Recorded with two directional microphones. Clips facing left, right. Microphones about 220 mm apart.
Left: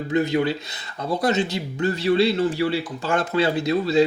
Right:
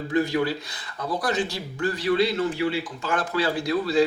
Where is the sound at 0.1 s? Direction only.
20° left (ahead or behind).